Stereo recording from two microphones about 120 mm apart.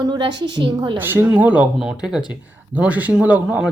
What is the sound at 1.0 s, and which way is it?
Speech, 15° right (ahead or behind).